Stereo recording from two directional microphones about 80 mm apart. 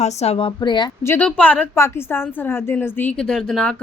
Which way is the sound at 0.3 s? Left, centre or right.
Left.